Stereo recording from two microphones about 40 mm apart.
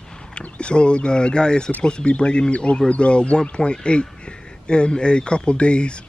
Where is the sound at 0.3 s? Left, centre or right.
Left.